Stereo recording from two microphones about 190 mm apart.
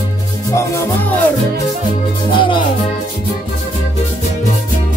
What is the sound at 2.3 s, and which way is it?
Music, 25° left (ahead or behind).